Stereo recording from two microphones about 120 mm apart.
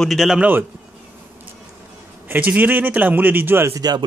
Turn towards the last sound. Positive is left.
turn(degrees=-35)  # may be behind; listen again after turning